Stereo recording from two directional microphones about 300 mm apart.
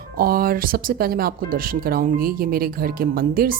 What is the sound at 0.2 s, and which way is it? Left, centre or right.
Speech, right.